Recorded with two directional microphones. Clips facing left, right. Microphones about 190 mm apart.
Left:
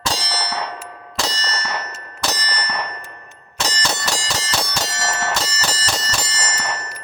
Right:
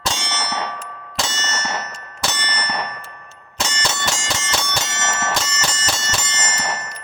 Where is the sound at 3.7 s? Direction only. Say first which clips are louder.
Left 1 dB; 35° left (ahead or behind).